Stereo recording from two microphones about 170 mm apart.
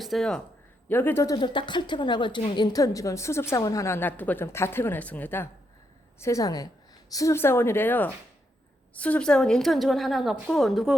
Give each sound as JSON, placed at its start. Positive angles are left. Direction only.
{"t": 0.0, "sound": "a woman's voice", "side_deg": 0}